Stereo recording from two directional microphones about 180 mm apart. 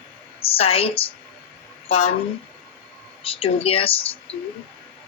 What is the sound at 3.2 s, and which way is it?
Speech, 30° left (ahead or behind).